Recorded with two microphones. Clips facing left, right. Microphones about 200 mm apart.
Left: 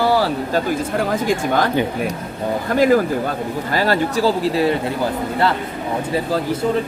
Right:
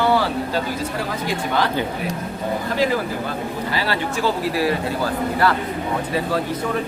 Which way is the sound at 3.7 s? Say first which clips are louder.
Left 8 dB; 45° left (ahead or behind).